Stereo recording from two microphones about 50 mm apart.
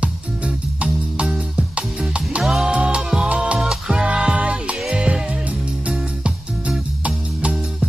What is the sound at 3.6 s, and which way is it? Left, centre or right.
Music, centre.